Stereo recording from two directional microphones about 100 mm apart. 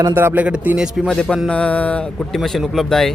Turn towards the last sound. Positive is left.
turn(degrees=5)  # may be behind; listen again after turning